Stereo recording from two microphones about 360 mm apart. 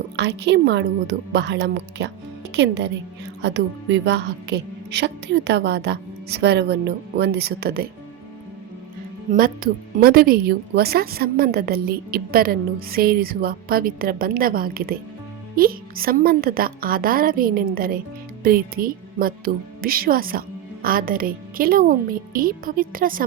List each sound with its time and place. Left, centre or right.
0.2 s a woman's voice: right
10.0 s a woman's voice: right